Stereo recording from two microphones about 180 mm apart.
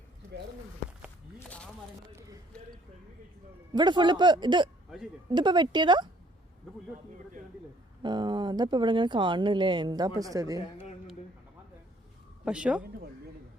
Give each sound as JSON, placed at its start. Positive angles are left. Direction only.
{"t": 1.5, "sound": "a sound", "side_deg": 5}
{"t": 3.7, "sound": "speech", "side_deg": -25}
{"t": 8.0, "sound": "speech", "side_deg": -25}
{"t": 12.5, "sound": "speech", "side_deg": -5}